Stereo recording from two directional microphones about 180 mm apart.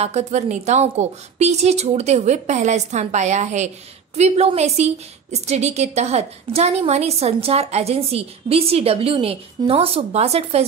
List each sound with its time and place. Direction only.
0.0 s a woman's voice: 40° right (ahead or behind)